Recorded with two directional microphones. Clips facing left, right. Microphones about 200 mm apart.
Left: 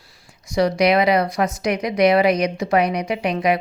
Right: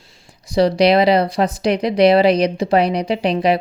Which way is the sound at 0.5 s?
30° right (ahead or behind).